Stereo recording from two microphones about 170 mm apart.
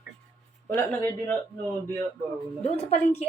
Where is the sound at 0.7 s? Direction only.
15° left (ahead or behind).